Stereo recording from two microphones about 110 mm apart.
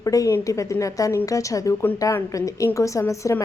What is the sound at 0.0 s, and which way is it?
A woman's voice, 30° left (ahead or behind).